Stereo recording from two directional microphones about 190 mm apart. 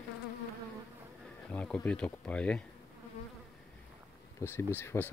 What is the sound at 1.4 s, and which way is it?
Speech, 5° left (ahead or behind).